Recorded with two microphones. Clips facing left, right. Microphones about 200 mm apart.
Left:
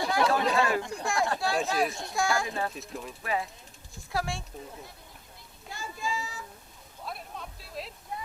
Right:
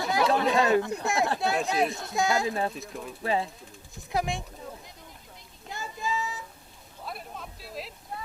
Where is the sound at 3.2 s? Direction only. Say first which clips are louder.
Right 5 dB; 30° right (ahead or behind).